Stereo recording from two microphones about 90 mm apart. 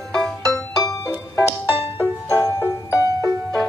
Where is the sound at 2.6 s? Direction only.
35° left (ahead or behind).